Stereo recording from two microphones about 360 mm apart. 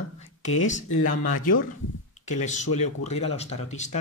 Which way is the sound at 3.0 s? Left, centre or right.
Centre.